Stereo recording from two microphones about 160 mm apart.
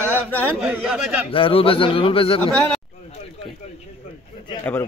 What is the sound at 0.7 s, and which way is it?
Speech, 10° right (ahead or behind).